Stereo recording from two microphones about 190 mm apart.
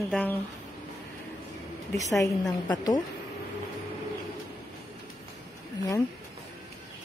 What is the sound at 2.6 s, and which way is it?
Speech, 20° left (ahead or behind).